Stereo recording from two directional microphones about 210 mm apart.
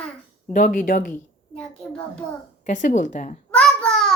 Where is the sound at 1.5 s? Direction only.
5° left (ahead or behind).